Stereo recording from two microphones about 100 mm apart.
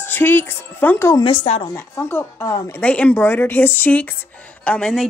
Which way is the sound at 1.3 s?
90° left.